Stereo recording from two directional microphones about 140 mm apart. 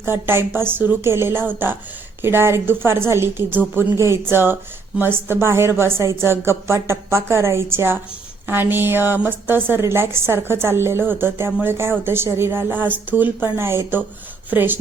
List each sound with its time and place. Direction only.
0.0 s a woman's voice: 15° right (ahead or behind)